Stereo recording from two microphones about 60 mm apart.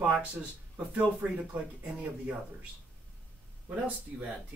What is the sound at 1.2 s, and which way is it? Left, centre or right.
Speech, right.